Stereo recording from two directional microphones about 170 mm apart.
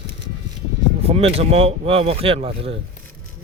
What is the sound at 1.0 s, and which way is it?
Speech, 35° right (ahead or behind).